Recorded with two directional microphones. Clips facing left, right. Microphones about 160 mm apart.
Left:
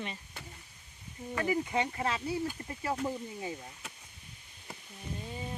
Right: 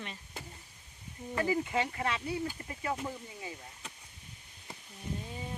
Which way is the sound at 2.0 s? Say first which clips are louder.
Left 1 dB; 30° left (ahead or behind).